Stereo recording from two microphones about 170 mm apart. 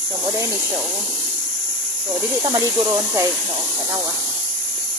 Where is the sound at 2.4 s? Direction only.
20° right (ahead or behind).